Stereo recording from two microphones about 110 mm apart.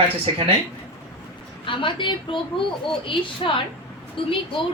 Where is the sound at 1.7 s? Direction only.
50° left (ahead or behind).